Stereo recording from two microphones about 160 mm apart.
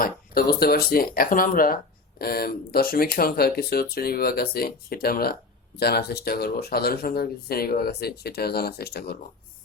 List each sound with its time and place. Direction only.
0.0 s speech: 70° left (ahead or behind)